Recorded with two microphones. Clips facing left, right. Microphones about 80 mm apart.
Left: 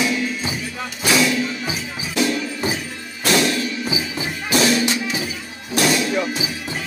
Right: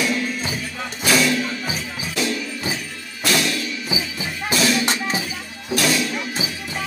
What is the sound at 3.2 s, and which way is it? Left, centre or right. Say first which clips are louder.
Music: left 3 dB; left.